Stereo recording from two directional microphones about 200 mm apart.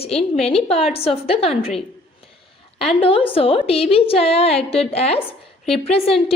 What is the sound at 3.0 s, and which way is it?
A woman's voice, 25° left (ahead or behind).